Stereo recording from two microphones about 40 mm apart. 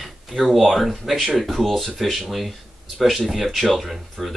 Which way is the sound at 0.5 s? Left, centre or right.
Centre.